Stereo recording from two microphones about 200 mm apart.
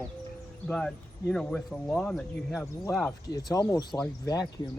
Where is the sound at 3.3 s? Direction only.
20° left (ahead or behind).